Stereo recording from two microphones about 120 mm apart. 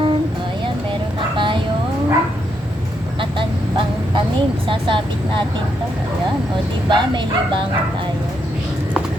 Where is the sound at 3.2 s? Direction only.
45° right (ahead or behind).